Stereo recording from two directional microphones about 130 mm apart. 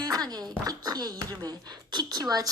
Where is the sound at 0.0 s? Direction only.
30° right (ahead or behind).